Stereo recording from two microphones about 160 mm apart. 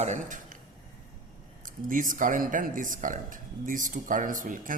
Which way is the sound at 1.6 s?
55° right (ahead or behind).